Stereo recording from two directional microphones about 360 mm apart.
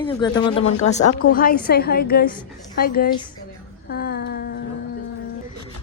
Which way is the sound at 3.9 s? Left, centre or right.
Left.